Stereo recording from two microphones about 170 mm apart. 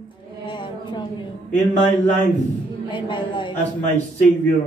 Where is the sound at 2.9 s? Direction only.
30° left (ahead or behind).